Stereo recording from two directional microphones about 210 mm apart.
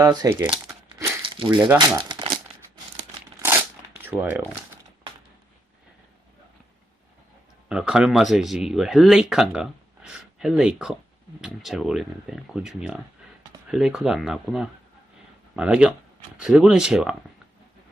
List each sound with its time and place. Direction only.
0.0 s crumpling: 20° right (ahead or behind)
1.5 s speech: 5° right (ahead or behind)
2.0 s crumpling: 20° right (ahead or behind)
4.0 s speech: 10° right (ahead or behind)
7.7 s speech: 5° right (ahead or behind)